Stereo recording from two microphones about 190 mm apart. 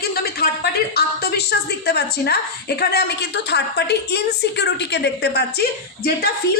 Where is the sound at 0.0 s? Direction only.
55° left (ahead or behind).